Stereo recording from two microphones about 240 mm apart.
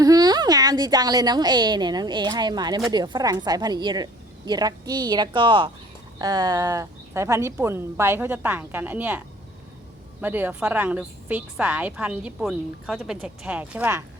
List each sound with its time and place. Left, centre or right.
0.0 s a woman's voice: centre